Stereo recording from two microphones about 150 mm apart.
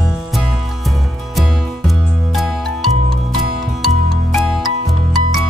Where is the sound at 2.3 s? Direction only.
Centre (ahead or behind).